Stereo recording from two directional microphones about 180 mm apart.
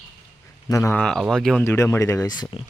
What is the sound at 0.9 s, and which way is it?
Speech, 5° left (ahead or behind).